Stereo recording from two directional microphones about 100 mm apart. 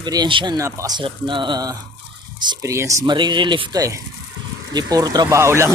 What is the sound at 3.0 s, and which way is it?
Speech, 50° right (ahead or behind).